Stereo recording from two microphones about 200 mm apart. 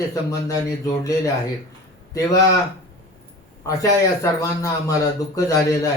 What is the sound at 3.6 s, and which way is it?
A man's voice, 15° left (ahead or behind).